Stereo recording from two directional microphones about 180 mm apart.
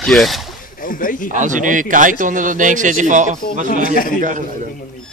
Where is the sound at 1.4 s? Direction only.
45° right (ahead or behind).